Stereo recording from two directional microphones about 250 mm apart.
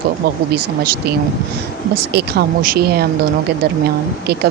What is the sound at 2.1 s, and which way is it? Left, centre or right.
Speech, right.